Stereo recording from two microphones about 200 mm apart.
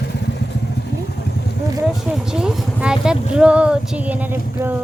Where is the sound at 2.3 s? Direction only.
5° right (ahead or behind).